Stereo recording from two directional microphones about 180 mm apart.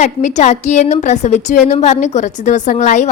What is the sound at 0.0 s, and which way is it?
A woman's voice, 40° left (ahead or behind).